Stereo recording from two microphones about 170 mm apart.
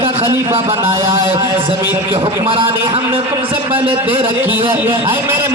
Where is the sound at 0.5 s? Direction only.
15° right (ahead or behind).